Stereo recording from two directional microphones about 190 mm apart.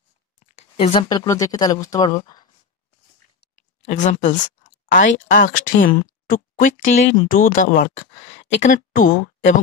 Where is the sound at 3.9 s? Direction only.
40° left (ahead or behind).